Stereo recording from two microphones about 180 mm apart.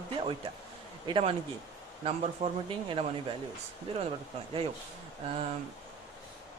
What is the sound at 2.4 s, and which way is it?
Speech, 25° right (ahead or behind).